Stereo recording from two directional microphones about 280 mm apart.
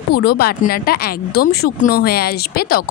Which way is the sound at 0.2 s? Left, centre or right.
Left.